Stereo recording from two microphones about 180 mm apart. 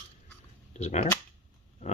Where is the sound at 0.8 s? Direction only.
40° left (ahead or behind).